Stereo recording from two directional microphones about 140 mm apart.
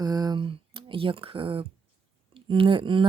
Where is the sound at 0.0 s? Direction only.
30° right (ahead or behind).